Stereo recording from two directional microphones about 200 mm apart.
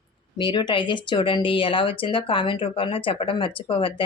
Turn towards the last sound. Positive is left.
turn(degrees=25)  # may be behind; listen again after turning